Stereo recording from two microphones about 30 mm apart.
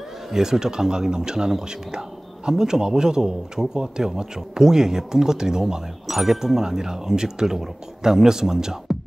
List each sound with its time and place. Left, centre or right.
0.3 s speech: centre